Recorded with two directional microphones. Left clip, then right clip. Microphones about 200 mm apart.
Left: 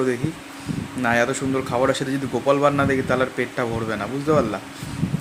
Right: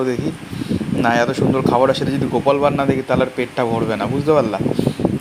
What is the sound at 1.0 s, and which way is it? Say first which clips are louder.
Speech: right 4 dB; 10° right (ahead or behind).